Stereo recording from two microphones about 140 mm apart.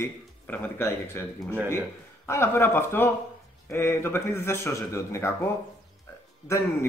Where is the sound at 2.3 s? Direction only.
20° left (ahead or behind).